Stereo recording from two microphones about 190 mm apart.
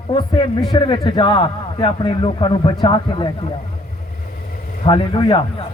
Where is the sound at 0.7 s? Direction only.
25° left (ahead or behind).